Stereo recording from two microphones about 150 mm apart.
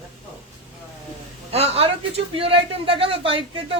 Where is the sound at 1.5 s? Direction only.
40° right (ahead or behind).